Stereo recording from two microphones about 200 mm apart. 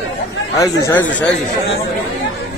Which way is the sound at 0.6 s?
15° left (ahead or behind).